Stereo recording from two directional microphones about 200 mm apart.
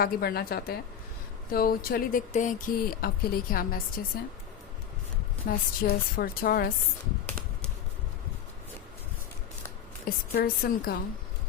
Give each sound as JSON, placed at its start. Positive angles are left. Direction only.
{"t": 0.0, "sound": "speech", "side_deg": 50}
{"t": 5.5, "sound": "speech", "side_deg": 50}
{"t": 10.1, "sound": "speech", "side_deg": 45}